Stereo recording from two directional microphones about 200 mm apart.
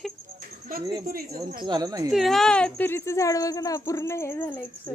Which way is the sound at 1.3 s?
20° right (ahead or behind).